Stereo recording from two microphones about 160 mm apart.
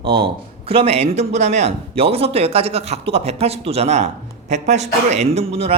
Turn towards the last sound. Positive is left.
turn(degrees=-40)  # may be behind; listen again after turning